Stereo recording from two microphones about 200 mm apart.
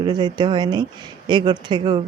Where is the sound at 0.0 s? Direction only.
20° right (ahead or behind).